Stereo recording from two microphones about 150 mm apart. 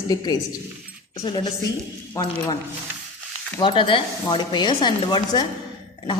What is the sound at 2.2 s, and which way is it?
Speech, 20° left (ahead or behind).